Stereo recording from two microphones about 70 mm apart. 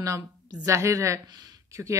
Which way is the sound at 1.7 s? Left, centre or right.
Right.